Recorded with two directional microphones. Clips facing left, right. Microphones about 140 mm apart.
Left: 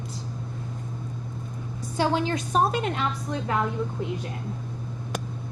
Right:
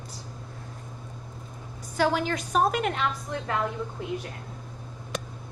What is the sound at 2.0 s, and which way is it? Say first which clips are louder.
Speech: left 1 dB; 25° left (ahead or behind).